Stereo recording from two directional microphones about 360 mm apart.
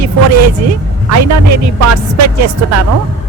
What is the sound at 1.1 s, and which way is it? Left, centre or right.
Speech, right.